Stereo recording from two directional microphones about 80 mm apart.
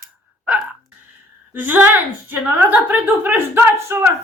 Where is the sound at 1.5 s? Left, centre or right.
Right.